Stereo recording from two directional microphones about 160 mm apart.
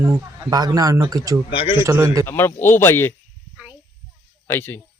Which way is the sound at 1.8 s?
15° right (ahead or behind).